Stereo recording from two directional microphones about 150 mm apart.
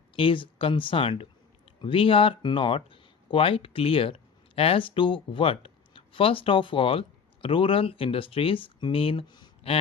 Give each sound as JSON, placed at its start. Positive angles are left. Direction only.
{"t": 0.2, "sound": "speech", "side_deg": 35}